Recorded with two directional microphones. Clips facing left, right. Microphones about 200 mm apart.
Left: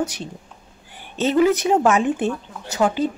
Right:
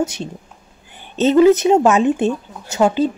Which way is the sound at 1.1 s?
20° right (ahead or behind).